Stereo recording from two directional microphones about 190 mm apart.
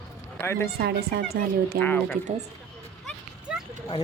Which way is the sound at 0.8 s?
60° right (ahead or behind).